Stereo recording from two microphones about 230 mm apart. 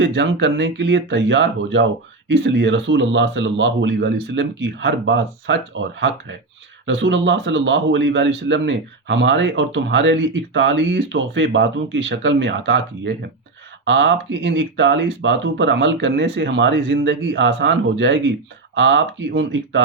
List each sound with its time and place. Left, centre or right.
0.0 s a man's voice: right